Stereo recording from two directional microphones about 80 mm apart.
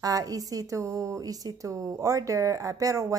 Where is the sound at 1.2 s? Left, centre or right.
Right.